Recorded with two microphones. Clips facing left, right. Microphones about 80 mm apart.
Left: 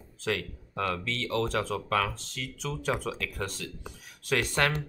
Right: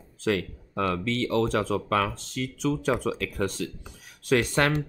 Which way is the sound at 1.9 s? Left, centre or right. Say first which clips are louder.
Right 3 dB; right.